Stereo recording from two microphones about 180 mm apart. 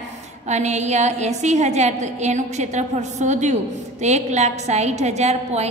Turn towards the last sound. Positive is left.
turn(degrees=-35)  # may be behind; listen again after turning